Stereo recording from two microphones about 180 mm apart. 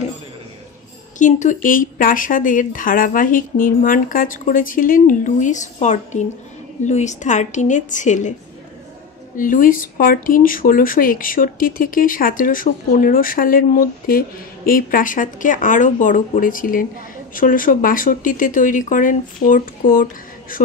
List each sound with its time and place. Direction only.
1.1 s speech: 45° left (ahead or behind)
9.4 s speech: 50° left (ahead or behind)